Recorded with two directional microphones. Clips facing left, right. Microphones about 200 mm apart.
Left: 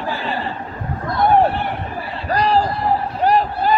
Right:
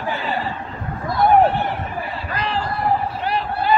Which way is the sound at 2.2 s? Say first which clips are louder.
Left 10 dB; 40° left (ahead or behind).